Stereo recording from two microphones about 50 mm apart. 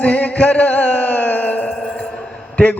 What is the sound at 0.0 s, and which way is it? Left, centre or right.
Music, left.